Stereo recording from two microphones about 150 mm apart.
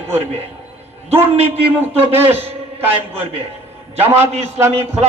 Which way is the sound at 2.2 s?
15° right (ahead or behind).